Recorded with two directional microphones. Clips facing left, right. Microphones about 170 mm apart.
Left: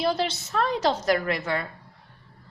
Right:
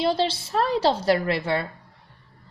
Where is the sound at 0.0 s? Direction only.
30° right (ahead or behind).